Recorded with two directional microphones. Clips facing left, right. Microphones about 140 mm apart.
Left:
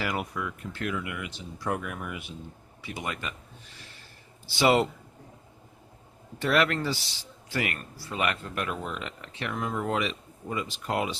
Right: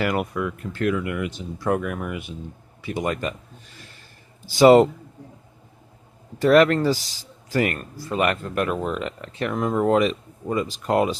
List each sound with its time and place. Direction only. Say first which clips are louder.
0.0 s speech: right 8 dB; 55° right (ahead or behind)
4.4 s speech: right 10 dB; 45° right (ahead or behind)
6.4 s speech: right 10 dB; 40° right (ahead or behind)